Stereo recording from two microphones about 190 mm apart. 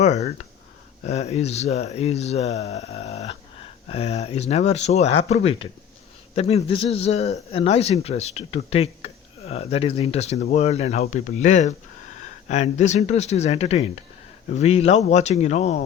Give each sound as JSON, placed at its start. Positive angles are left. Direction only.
{"t": 0.0, "sound": "speech", "side_deg": 35}
{"t": 6.7, "sound": "speech", "side_deg": 30}